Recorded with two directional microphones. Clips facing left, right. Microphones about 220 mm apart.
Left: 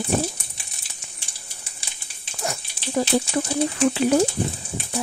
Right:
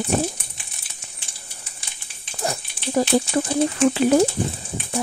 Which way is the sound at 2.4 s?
35° right (ahead or behind).